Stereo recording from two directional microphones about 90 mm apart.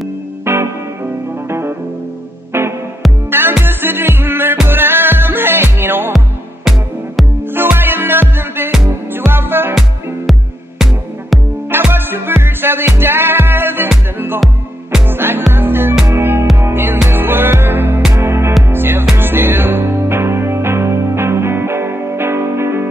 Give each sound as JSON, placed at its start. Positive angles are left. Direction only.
{"t": 0.5, "sound": "music", "side_deg": -25}
{"t": 3.3, "sound": "music", "side_deg": -25}
{"t": 7.5, "sound": "music", "side_deg": -25}
{"t": 11.7, "sound": "music", "side_deg": -25}
{"t": 14.4, "sound": "music", "side_deg": -5}
{"t": 15.0, "sound": "music", "side_deg": -25}